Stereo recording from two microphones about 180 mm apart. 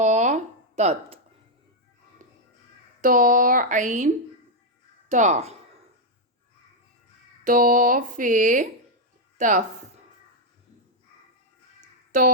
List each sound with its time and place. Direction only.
0.0 s a sound: 40° right (ahead or behind)
3.0 s speech: 50° right (ahead or behind)
7.4 s speech: 50° right (ahead or behind)